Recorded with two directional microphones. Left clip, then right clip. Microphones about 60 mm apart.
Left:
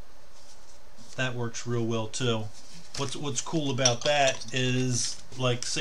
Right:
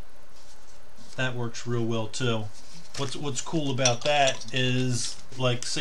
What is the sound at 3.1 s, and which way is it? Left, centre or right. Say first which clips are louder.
Speech: right 1 dB; left.